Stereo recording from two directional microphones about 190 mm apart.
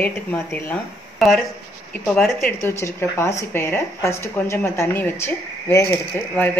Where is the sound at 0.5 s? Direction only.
5° left (ahead or behind).